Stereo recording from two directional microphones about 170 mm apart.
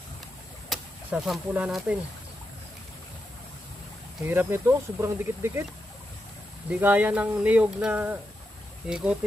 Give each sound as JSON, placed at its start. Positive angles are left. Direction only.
{"t": 0.7, "sound": "speech", "side_deg": 0}
{"t": 4.3, "sound": "speech", "side_deg": -15}
{"t": 6.7, "sound": "speech", "side_deg": -10}